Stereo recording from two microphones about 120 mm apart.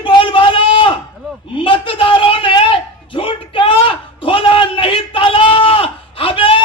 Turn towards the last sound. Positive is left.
turn(degrees=50)  # may be behind; listen again after turning